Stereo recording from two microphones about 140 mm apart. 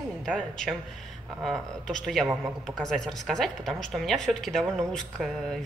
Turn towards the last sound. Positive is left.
turn(degrees=5)  # may be behind; listen again after turning